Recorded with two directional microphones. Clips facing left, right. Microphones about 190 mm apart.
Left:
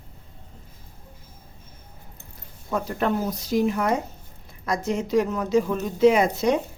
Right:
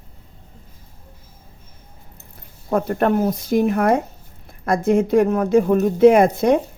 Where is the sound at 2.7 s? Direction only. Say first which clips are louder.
Right 6 dB; 55° right (ahead or behind).